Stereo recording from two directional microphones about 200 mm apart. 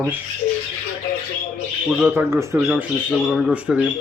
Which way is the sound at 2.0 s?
10° right (ahead or behind).